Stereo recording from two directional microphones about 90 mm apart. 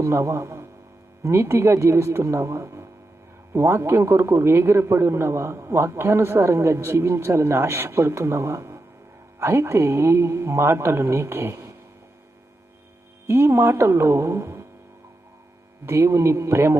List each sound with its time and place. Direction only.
0.0 s a man's voice: 30° right (ahead or behind)
13.2 s a man's voice: 30° right (ahead or behind)
15.9 s a man's voice: 30° right (ahead or behind)